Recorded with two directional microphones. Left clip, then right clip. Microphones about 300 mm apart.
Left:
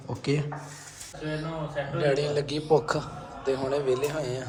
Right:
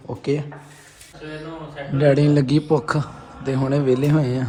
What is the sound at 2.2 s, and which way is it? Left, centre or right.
A man's voice, centre.